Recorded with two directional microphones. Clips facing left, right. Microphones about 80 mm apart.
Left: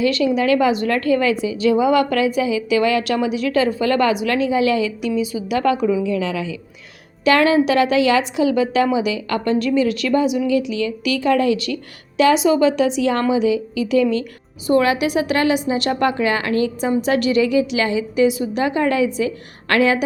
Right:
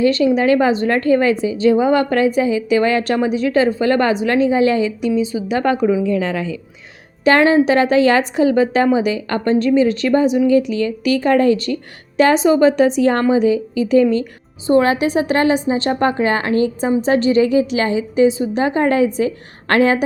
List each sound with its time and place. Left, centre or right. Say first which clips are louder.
0.0 s a woman's voice: right 3 dB; right